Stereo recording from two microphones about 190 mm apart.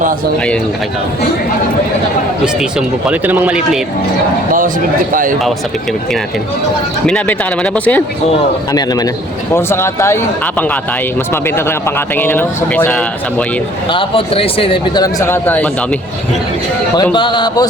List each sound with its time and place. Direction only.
2.4 s speech: 5° right (ahead or behind)
5.1 s speech: 45° right (ahead or behind)
7.1 s speech: 5° left (ahead or behind)
8.7 s speech: 20° left (ahead or behind)
13.9 s speech: 30° left (ahead or behind); by 16.0 s 10° left (ahead or behind)
17.0 s speech: 25° left (ahead or behind)